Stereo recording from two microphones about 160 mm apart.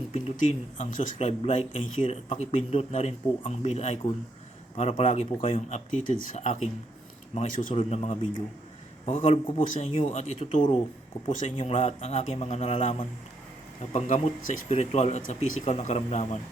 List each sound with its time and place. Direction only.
0.9 s speech: 55° left (ahead or behind)
1.3 s speech: 40° left (ahead or behind); by 7.7 s 55° left (ahead or behind)
7.7 s speech: 35° left (ahead or behind); by 9.9 s 55° left (ahead or behind)
9.9 s speech: 40° left (ahead or behind)
11.3 s speech: 50° left (ahead or behind)
11.5 s speech: 35° left (ahead or behind)
13.9 s speech: 50° left (ahead or behind)